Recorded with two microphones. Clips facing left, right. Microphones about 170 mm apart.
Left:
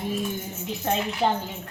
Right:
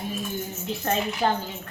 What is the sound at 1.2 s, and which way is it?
Speech, 20° left (ahead or behind).